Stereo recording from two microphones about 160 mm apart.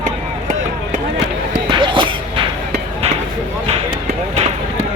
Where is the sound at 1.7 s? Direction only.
30° right (ahead or behind).